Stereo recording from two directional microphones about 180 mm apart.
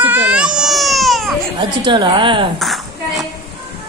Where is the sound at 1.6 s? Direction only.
25° right (ahead or behind).